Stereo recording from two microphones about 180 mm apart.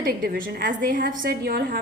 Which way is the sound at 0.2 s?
50° right (ahead or behind).